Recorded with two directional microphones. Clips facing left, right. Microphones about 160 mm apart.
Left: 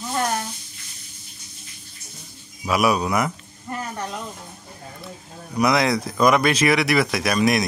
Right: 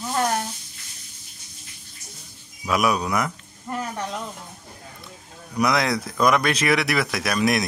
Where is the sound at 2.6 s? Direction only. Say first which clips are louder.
Left 2 dB; 5° left (ahead or behind).